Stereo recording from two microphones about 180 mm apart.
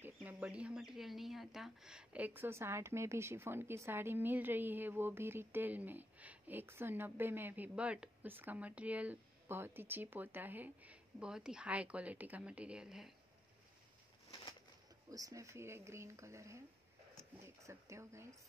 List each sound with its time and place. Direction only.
0.0 s speech: 10° right (ahead or behind)
15.0 s speech: 20° right (ahead or behind)